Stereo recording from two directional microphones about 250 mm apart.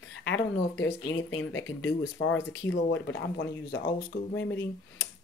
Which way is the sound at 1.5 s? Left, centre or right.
Left.